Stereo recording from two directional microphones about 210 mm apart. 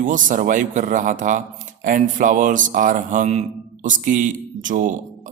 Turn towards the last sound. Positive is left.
turn(degrees=-35)  # may be behind; listen again after turning